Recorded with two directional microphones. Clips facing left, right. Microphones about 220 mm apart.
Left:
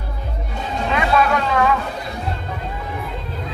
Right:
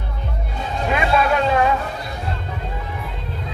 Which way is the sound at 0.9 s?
25° right (ahead or behind).